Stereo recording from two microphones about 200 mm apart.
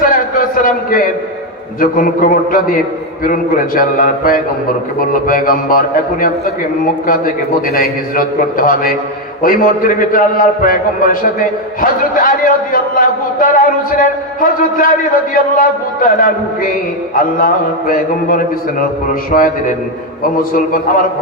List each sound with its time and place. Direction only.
0.0 s a sound: 45° left (ahead or behind)
1.8 s a man's voice: 45° left (ahead or behind)
7.7 s a man's voice: 45° left (ahead or behind)